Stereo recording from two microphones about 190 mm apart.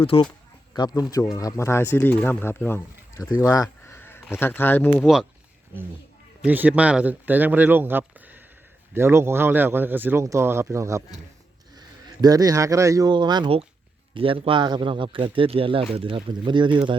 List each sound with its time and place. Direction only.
0.0 s speech: 30° left (ahead or behind); by 5.0 s 10° left (ahead or behind)
6.4 s speech: 10° right (ahead or behind)
12.2 s a man's voice: 20° right (ahead or behind)